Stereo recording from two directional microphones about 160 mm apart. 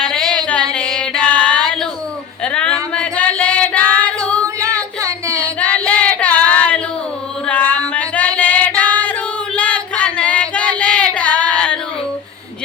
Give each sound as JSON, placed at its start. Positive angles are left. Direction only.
{"t": 0.0, "sound": "music", "side_deg": 5}
{"t": 2.4, "sound": "a sound", "side_deg": 5}
{"t": 2.9, "sound": "female singing", "side_deg": 10}
{"t": 4.4, "sound": "music", "side_deg": -20}
{"t": 5.4, "sound": "female singing", "side_deg": 10}
{"t": 9.6, "sound": "singing", "side_deg": 10}